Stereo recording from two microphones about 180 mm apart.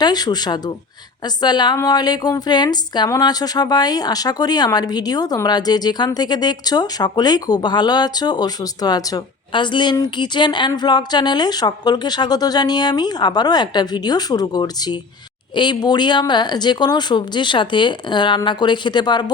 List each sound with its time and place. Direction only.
0.0 s a woman's voice: 20° left (ahead or behind)